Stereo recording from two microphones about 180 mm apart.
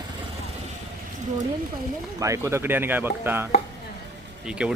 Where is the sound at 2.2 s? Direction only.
15° right (ahead or behind).